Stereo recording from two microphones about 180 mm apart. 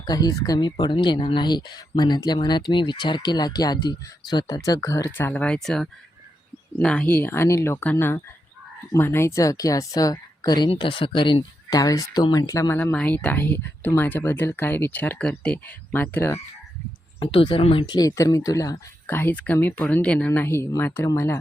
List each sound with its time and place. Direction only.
0.0 s a woman's voice: 20° left (ahead or behind)
17.2 s a woman's voice: 30° left (ahead or behind); by 21.3 s 15° left (ahead or behind)